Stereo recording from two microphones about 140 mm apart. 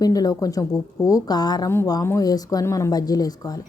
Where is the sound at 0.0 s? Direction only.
25° left (ahead or behind).